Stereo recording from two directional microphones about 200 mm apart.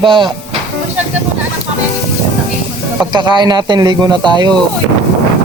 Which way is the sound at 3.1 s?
20° right (ahead or behind).